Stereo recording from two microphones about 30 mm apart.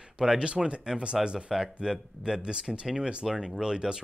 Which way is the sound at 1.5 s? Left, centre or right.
Centre.